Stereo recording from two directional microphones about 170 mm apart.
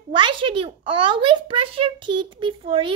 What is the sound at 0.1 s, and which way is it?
A child's voice, 30° right (ahead or behind).